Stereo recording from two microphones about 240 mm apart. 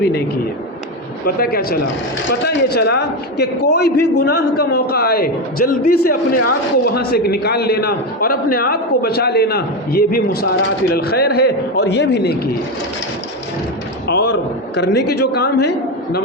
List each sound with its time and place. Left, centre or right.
1.4 s a man's voice: left
14.1 s a sound: left
14.8 s a man's voice: left